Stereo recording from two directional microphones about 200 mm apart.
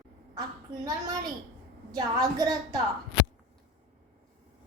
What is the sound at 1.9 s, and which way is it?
Speech, 20° right (ahead or behind).